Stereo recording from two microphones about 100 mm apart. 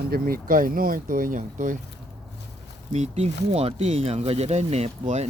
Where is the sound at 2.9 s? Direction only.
90° right.